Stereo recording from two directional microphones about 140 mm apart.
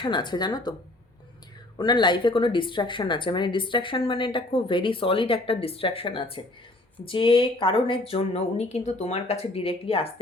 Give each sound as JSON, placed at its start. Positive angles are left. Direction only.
{"t": 0.0, "sound": "speech", "side_deg": 35}
{"t": 1.8, "sound": "speech", "side_deg": 35}